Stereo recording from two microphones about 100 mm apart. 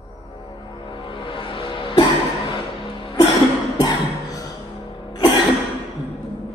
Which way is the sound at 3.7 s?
40° left (ahead or behind).